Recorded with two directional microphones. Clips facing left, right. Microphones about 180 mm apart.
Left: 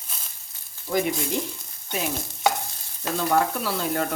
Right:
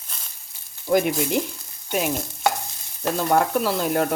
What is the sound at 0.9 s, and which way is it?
Speech, 60° right (ahead or behind).